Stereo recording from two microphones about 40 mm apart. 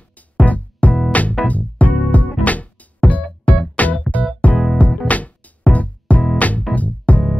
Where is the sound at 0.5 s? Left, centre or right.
Left.